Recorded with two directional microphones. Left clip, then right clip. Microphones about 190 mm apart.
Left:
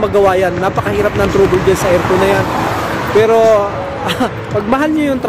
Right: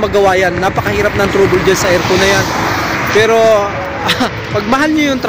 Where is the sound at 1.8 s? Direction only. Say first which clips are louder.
Right 1 dB; 25° left (ahead or behind).